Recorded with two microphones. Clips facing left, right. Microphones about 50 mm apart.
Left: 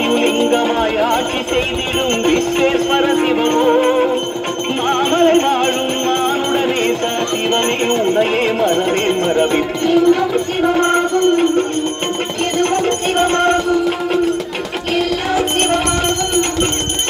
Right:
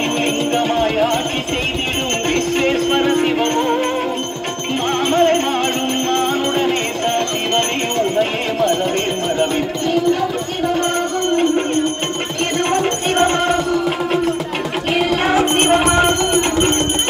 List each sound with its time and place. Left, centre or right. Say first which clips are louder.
0.1 s music: left 4 dB; centre
2.2 s music: left 2 dB; centre
13.1 s music: left 1 dB; centre
14.9 s music: right 1 dB; centre